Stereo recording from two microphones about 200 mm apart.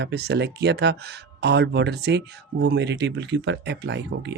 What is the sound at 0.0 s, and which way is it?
Speech, 55° right (ahead or behind).